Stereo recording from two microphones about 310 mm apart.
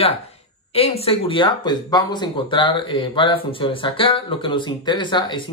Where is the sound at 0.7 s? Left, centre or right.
Centre.